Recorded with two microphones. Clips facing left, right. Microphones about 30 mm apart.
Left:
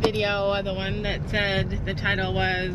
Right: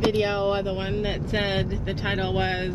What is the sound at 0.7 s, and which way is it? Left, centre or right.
Speech, left.